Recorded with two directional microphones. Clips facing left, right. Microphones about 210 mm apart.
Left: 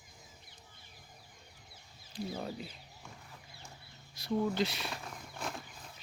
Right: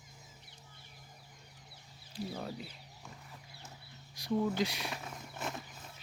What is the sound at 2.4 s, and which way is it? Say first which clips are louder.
Chicken: left 1 dB; centre (ahead or behind).